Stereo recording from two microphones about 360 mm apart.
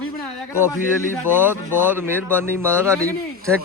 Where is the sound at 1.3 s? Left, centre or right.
Centre.